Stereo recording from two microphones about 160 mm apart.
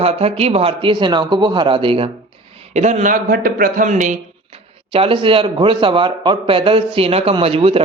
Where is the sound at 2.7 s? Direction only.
45° right (ahead or behind).